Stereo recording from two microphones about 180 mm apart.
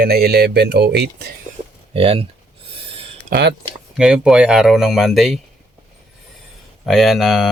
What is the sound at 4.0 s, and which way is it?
Speech, 5° right (ahead or behind).